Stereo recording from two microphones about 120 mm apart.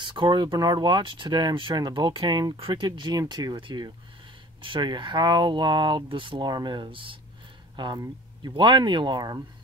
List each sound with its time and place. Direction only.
0.0 s speech: 40° right (ahead or behind)